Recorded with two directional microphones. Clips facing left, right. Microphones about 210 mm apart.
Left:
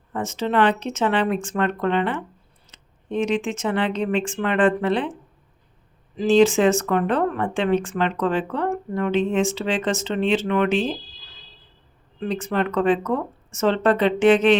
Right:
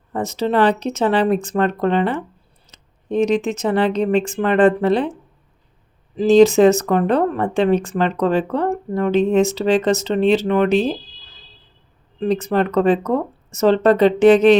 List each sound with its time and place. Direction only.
0.1 s speech: 35° right (ahead or behind)
6.1 s speech: 40° right (ahead or behind)
12.2 s speech: 40° right (ahead or behind)